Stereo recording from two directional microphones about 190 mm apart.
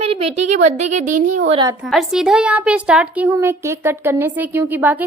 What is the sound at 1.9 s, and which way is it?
Speech, centre (ahead or behind).